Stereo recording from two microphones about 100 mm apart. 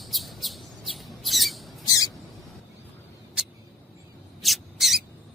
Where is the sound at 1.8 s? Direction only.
40° left (ahead or behind).